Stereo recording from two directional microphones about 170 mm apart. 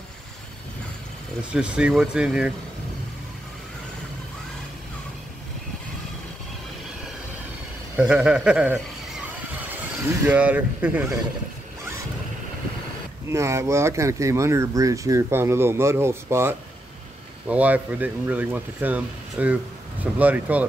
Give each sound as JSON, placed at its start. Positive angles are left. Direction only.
{"t": 1.5, "sound": "speech", "side_deg": -5}
{"t": 8.1, "sound": "speech", "side_deg": -5}
{"t": 13.3, "sound": "speech", "side_deg": -15}